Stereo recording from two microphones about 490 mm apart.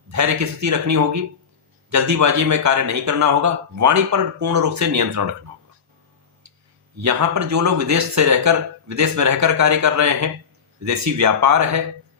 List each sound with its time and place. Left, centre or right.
0.1 s speech: right
7.0 s speech: right